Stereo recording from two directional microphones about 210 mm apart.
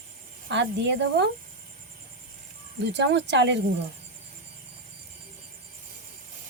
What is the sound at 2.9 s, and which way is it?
Speech, 55° right (ahead or behind).